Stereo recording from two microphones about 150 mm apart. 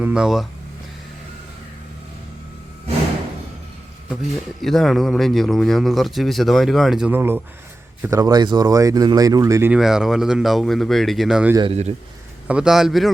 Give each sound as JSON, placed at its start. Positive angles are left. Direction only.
{"t": 0.0, "sound": "speech", "side_deg": -5}
{"t": 4.6, "sound": "speech", "side_deg": 0}
{"t": 7.1, "sound": "speech", "side_deg": -15}
{"t": 9.7, "sound": "speech", "side_deg": -5}
{"t": 11.7, "sound": "speech", "side_deg": -45}
{"t": 12.5, "sound": "speech", "side_deg": -5}